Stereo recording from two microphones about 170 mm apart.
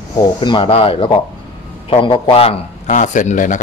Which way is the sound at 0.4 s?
30° left (ahead or behind).